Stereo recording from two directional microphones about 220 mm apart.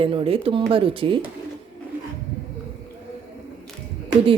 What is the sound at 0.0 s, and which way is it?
Speech, 25° right (ahead or behind).